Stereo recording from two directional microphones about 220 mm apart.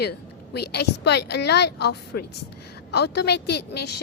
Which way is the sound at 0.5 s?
45° left (ahead or behind).